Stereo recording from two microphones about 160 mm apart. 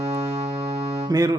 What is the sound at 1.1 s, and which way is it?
Music, 25° right (ahead or behind).